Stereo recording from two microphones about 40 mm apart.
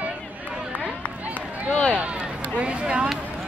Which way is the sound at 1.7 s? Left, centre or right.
Left.